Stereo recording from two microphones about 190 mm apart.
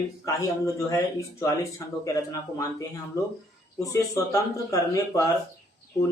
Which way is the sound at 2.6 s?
15° left (ahead or behind).